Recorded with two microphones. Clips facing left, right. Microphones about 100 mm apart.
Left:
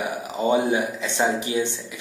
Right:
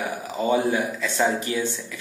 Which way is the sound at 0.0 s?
20° left (ahead or behind).